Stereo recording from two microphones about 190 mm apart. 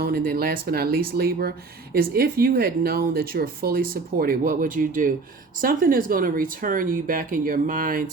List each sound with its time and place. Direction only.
0.0 s speech: 50° right (ahead or behind)